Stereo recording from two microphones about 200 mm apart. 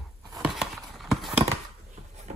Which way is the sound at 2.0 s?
35° right (ahead or behind).